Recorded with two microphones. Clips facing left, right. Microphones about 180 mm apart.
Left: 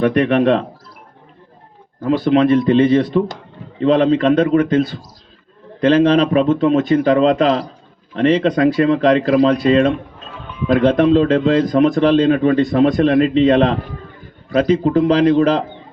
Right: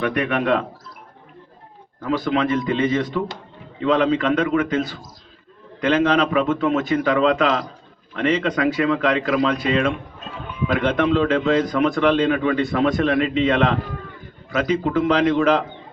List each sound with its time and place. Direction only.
0.0 s a man's voice: 35° left (ahead or behind)
2.0 s a man's voice: 30° left (ahead or behind)